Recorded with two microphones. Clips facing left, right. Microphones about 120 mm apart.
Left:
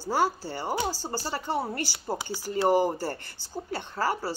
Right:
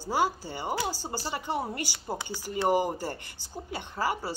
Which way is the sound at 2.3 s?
15° right (ahead or behind).